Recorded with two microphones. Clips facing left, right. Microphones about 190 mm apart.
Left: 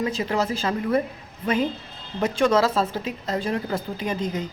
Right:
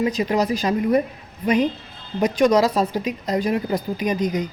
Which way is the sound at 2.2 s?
15° right (ahead or behind).